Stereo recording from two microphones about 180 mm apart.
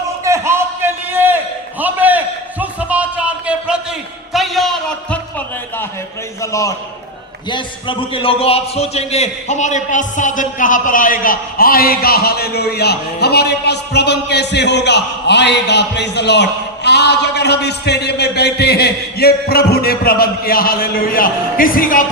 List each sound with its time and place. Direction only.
0.3 s a sound: 15° right (ahead or behind)
4.3 s a man's voice: centre (ahead or behind)
6.4 s a man's voice: 15° left (ahead or behind)
7.5 s speech: 30° left (ahead or behind); by 22.0 s 50° left (ahead or behind)